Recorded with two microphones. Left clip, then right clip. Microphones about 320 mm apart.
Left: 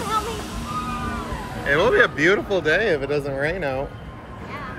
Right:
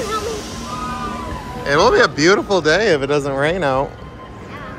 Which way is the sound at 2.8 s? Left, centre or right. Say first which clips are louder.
Right 6 dB; right.